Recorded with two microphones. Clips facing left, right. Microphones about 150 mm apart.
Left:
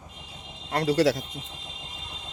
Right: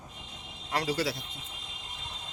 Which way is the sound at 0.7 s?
60° left (ahead or behind).